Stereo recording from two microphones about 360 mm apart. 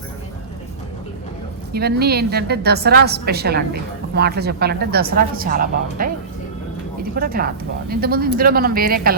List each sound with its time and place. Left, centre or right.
1.7 s a woman's voice: right
7.2 s a woman's voice: right